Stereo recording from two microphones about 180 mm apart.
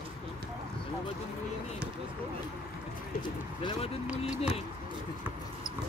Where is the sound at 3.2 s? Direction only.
30° left (ahead or behind).